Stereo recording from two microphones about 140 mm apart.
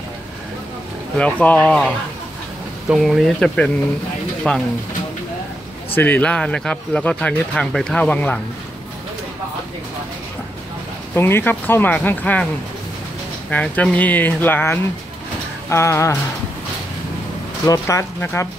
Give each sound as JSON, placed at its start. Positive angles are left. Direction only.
{"t": 1.1, "sound": "speech", "side_deg": 10}
{"t": 2.9, "sound": "speech", "side_deg": 0}
{"t": 5.9, "sound": "speech", "side_deg": 10}
{"t": 11.1, "sound": "speech", "side_deg": 15}
{"t": 13.5, "sound": "speech", "side_deg": 10}
{"t": 17.6, "sound": "speech", "side_deg": 20}